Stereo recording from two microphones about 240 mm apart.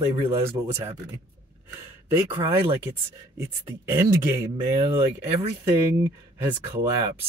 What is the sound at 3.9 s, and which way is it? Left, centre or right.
Speech, centre.